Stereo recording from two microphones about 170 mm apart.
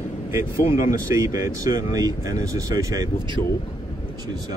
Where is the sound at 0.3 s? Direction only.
15° right (ahead or behind).